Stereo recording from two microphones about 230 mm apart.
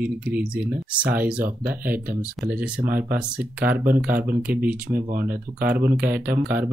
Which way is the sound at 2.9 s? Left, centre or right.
Right.